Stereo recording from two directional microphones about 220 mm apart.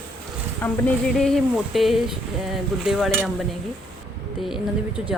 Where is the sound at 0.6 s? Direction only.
10° left (ahead or behind).